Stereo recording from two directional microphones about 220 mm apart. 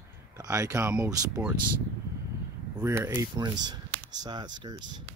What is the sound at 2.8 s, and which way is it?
Speech, 10° right (ahead or behind).